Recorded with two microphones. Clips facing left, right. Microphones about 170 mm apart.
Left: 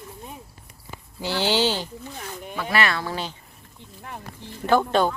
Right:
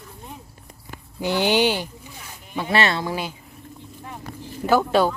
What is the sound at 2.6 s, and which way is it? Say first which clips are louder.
Speech: right 3 dB; 25° right (ahead or behind).